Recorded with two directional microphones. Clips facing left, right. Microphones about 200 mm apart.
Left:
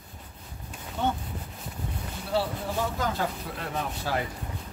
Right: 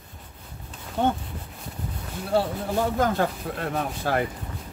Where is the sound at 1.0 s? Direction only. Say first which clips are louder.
Right 5 dB; 55° right (ahead or behind).